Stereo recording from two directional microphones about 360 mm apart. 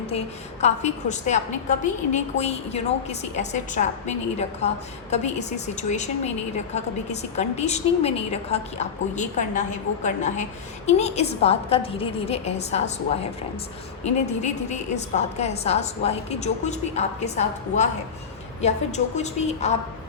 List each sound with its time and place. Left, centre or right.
0.6 s a woman's voice: centre
14.0 s a woman's voice: centre